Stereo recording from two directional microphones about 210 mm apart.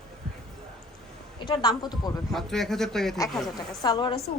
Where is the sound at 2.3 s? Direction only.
Centre (ahead or behind).